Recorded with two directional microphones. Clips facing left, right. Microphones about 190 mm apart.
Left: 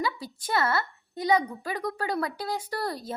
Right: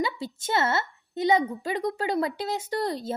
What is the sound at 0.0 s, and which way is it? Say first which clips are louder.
A woman's voice: right 2 dB; 25° right (ahead or behind).